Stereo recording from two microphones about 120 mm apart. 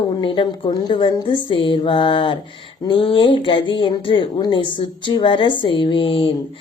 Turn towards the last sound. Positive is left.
turn(degrees=45)  # may be behind; listen again after turning